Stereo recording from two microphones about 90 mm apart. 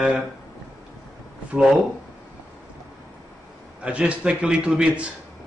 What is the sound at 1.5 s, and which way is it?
Speech, 10° right (ahead or behind).